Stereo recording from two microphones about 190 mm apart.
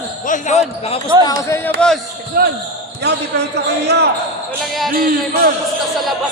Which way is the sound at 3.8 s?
60° right (ahead or behind).